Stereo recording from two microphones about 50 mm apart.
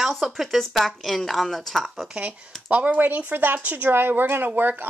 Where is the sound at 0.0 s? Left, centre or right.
Centre.